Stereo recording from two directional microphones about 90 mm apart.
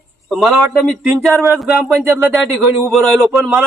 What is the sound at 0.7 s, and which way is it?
Speech, 15° left (ahead or behind).